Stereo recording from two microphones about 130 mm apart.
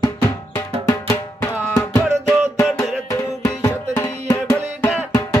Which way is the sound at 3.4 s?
25° left (ahead or behind).